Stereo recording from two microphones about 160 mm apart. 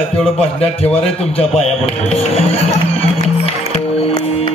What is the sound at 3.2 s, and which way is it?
Music, 40° left (ahead or behind).